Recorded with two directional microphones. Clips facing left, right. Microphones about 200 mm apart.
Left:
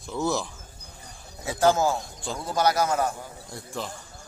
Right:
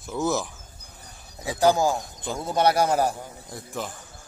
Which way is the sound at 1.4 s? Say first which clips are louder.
Right 1 dB; 15° right (ahead or behind).